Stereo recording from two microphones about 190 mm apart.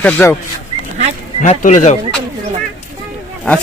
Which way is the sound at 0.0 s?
10° left (ahead or behind).